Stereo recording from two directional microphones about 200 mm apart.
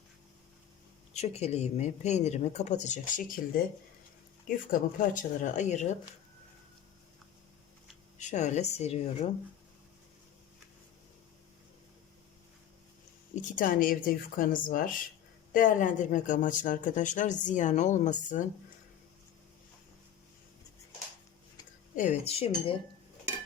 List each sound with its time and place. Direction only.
1.1 s speech: 30° left (ahead or behind)
8.2 s speech: 35° left (ahead or behind)
13.3 s speech: 45° left (ahead or behind)
22.2 s speech: 30° left (ahead or behind)